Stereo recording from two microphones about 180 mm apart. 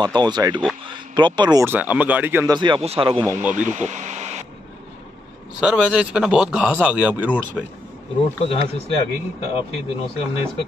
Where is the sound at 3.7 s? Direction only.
40° right (ahead or behind).